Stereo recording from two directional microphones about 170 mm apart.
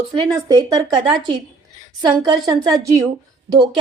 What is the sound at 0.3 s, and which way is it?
Speech, 20° right (ahead or behind).